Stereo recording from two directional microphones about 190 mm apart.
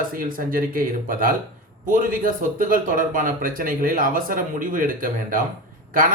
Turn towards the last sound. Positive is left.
turn(degrees=-45)  # may be behind; listen again after turning